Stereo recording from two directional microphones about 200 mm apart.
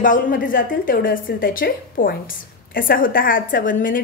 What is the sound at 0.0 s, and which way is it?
A woman's voice, 40° left (ahead or behind).